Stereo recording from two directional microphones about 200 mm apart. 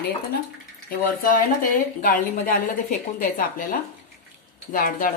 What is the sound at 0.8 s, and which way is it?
A woman's voice, 40° left (ahead or behind).